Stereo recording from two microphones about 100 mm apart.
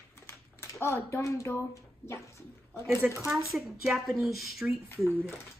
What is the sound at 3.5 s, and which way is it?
A woman's voice, centre (ahead or behind).